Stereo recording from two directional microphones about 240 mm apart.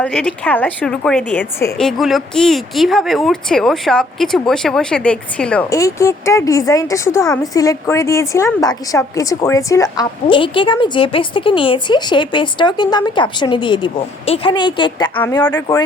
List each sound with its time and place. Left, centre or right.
0.0 s a woman's voice: centre